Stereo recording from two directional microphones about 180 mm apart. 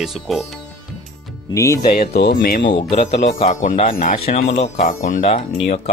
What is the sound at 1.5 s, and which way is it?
Speech, 15° left (ahead or behind).